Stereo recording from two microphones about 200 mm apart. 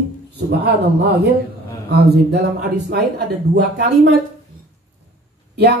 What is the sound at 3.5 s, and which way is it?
Speech, 55° right (ahead or behind).